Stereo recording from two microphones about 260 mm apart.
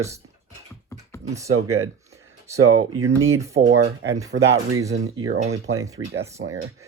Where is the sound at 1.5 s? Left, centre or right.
Right.